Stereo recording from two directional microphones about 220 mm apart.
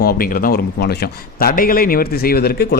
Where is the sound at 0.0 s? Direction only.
40° left (ahead or behind).